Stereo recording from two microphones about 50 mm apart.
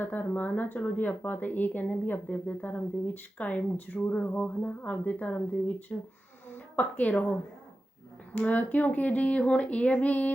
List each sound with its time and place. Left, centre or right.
0.0 s a woman's voice: left
6.5 s a sound: left
8.3 s a woman's voice: left